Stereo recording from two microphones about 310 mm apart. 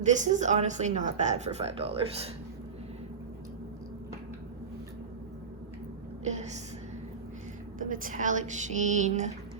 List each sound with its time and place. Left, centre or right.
0.0 s speech: right
6.2 s speech: right
7.8 s speech: right